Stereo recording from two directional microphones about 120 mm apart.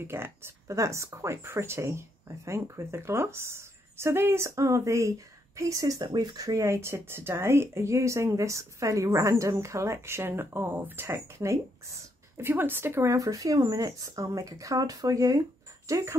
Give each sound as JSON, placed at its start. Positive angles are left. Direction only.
{"t": 0.0, "sound": "speech", "side_deg": -20}